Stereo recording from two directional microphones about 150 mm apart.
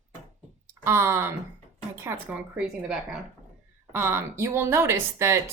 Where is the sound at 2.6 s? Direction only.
5° right (ahead or behind).